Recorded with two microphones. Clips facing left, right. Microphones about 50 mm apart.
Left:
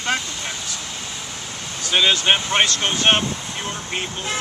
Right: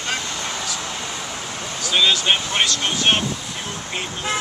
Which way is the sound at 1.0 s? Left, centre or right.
Right.